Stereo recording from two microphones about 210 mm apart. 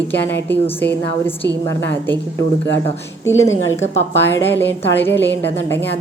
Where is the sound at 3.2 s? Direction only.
15° left (ahead or behind).